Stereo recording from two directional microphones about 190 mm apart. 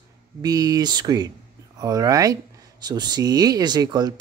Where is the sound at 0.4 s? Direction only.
20° right (ahead or behind).